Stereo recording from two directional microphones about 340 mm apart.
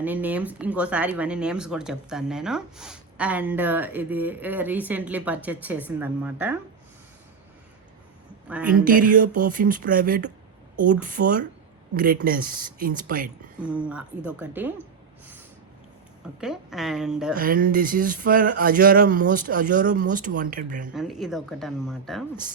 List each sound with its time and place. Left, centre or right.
0.0 s speech: centre
8.4 s speech: centre
8.8 s speech: right
13.6 s speech: centre
16.4 s speech: centre
17.3 s speech: right
20.9 s speech: centre